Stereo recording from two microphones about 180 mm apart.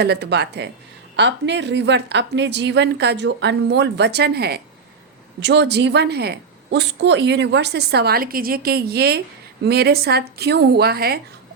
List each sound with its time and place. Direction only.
0.0 s a woman's voice: 70° right (ahead or behind)